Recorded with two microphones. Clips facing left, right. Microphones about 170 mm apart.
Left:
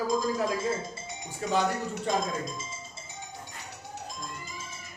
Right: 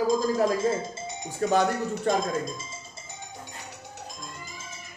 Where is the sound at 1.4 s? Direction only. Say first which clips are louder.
Right 4 dB; 50° right (ahead or behind).